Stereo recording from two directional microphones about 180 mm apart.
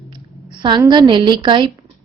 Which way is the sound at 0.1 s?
25° right (ahead or behind).